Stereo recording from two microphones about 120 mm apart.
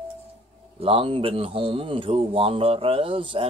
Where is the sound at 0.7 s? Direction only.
50° right (ahead or behind).